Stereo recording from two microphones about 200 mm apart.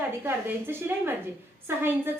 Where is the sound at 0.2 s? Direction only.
10° right (ahead or behind).